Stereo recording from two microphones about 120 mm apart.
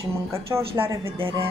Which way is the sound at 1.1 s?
50° right (ahead or behind).